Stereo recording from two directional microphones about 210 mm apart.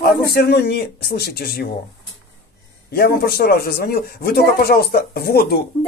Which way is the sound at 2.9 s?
45° left (ahead or behind).